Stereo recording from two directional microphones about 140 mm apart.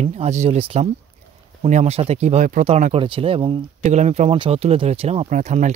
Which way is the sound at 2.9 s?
40° right (ahead or behind).